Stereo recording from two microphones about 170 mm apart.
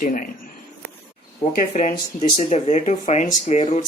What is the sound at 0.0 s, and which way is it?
Speech, 50° left (ahead or behind).